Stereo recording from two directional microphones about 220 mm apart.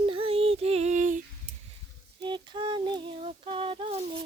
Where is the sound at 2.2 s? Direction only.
20° right (ahead or behind).